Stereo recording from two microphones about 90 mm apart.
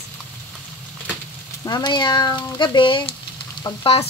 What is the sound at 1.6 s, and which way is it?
Speech, 50° left (ahead or behind).